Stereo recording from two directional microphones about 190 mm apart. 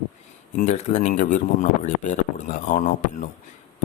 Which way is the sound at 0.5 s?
40° left (ahead or behind).